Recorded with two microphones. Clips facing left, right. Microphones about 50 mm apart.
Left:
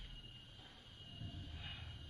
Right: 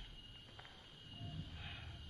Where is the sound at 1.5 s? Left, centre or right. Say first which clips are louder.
Even; centre.